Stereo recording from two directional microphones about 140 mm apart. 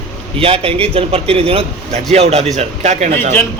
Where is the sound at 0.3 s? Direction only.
40° right (ahead or behind).